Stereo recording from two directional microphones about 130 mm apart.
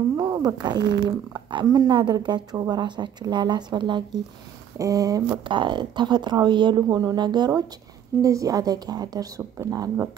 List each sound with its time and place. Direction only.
0.2 s a woman's voice: 25° right (ahead or behind)